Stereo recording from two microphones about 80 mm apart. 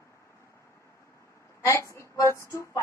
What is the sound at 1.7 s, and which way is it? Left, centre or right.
A woman's voice, left.